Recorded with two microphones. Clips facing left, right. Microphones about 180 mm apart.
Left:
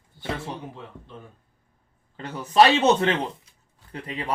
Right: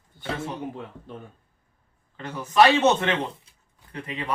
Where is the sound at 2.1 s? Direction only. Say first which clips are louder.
Left 2 dB; 30° left (ahead or behind).